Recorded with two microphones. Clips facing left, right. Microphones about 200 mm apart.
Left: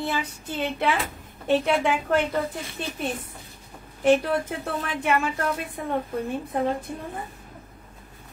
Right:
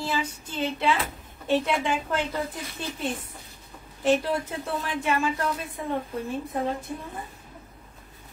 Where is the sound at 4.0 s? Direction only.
60° left (ahead or behind).